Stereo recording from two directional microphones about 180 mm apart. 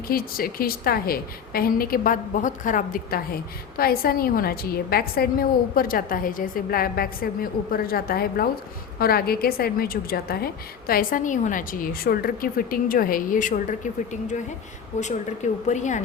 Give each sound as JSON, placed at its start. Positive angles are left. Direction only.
{"t": 0.1, "sound": "a woman's voice", "side_deg": 55}
{"t": 15.6, "sound": "a woman's voice", "side_deg": 40}